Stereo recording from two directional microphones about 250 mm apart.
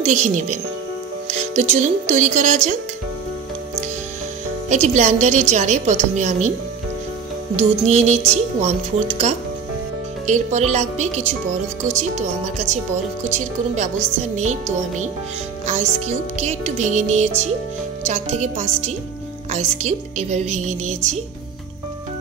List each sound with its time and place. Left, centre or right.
0.0 s a woman's voice: right
4.6 s a woman's voice: right
7.5 s a woman's voice: right